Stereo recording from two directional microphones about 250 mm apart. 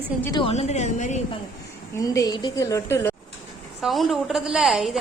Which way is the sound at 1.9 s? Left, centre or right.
Centre.